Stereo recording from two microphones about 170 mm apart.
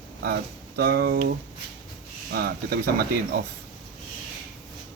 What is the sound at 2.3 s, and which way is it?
Speech, 65° right (ahead or behind).